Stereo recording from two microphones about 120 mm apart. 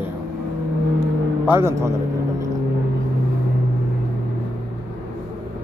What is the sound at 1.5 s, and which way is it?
Speech, 20° right (ahead or behind).